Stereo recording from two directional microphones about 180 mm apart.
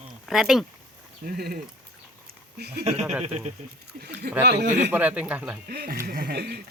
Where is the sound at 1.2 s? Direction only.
60° right (ahead or behind).